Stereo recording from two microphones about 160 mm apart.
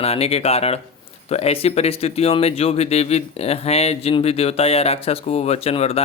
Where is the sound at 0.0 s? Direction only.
40° left (ahead or behind).